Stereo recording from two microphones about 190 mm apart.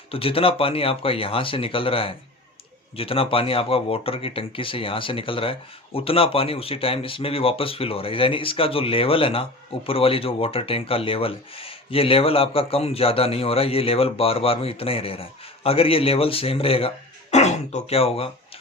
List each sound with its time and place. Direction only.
0.1 s speech: 30° left (ahead or behind)